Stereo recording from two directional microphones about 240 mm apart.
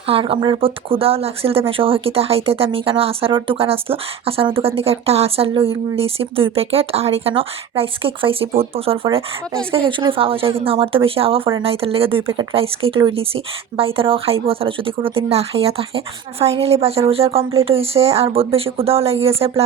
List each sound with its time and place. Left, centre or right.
0.1 s speech: right